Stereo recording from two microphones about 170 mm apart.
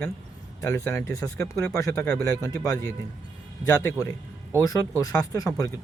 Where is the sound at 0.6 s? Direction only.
15° left (ahead or behind).